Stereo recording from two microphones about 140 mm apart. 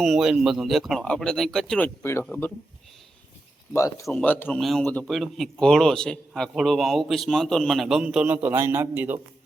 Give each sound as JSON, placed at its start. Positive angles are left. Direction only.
{"t": 0.0, "sound": "a man's voice", "side_deg": 0}
{"t": 3.7, "sound": "speech", "side_deg": 20}
{"t": 4.6, "sound": "a man's voice", "side_deg": 0}